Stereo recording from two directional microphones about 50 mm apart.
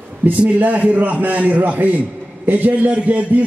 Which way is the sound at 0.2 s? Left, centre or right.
Right.